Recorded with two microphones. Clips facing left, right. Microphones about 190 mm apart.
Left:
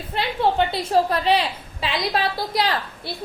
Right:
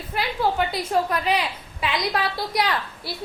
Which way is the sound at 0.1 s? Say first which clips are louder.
Left 2 dB; 25° left (ahead or behind).